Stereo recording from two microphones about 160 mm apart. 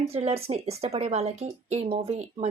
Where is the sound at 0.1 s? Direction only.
40° right (ahead or behind).